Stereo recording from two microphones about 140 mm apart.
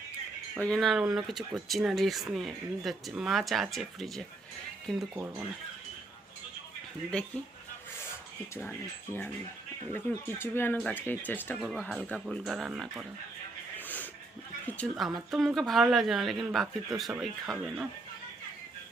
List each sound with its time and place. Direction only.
0.5 s speech: 5° left (ahead or behind)
7.1 s speech: 5° left (ahead or behind)
9.9 s speech: 15° left (ahead or behind)
11.6 s speech: centre (ahead or behind)
12.5 s speech: 5° right (ahead or behind)
13.7 s a sound: 10° left (ahead or behind)
14.8 s speech: centre (ahead or behind)